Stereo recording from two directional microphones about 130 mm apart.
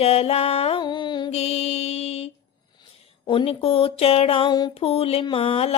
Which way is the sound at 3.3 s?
45° left (ahead or behind).